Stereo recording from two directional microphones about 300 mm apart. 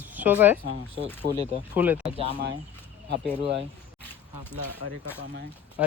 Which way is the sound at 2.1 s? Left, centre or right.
Centre.